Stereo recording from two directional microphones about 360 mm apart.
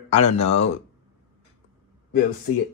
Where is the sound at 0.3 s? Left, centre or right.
Centre.